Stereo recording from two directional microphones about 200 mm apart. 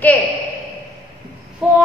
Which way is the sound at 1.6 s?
5° right (ahead or behind).